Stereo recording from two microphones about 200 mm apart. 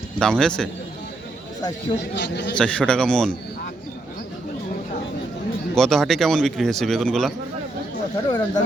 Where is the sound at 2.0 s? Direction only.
60° left (ahead or behind).